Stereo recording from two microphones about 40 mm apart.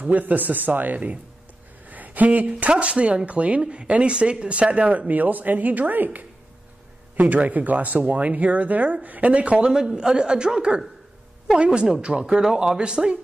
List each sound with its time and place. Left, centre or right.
0.0 s speech: right
2.7 s speech: right
9.6 s speech: centre